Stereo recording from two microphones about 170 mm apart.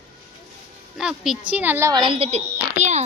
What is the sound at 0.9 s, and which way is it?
Speech, 5° right (ahead or behind).